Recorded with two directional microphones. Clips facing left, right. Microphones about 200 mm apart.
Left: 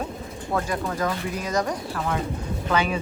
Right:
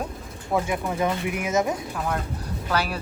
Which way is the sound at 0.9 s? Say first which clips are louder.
Right 2 dB; 20° right (ahead or behind).